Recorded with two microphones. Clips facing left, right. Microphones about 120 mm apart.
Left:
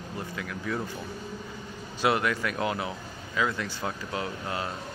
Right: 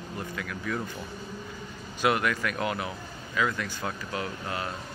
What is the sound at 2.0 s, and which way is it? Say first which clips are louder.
Speech: even; 25° left (ahead or behind).